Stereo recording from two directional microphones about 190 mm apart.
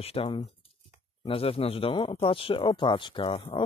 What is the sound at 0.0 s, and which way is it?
Speech, 30° left (ahead or behind).